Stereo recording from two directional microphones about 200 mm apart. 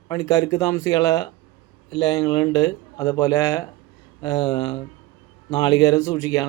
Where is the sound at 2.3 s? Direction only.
15° left (ahead or behind).